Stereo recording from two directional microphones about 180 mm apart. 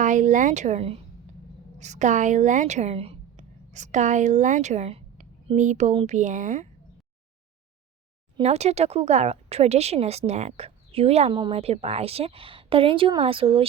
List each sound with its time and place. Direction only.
0.0 s a woman's voice: 45° right (ahead or behind)
8.4 s speech: 35° right (ahead or behind)